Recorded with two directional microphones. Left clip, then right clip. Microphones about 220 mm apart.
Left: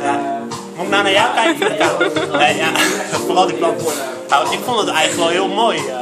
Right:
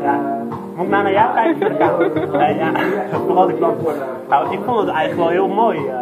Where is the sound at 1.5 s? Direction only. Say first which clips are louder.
Even; 10° left (ahead or behind).